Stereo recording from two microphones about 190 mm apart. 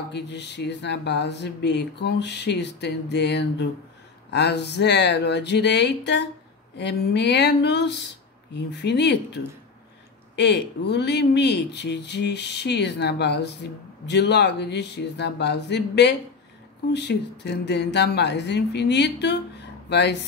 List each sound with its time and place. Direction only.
0.1 s speech: 65° left (ahead or behind)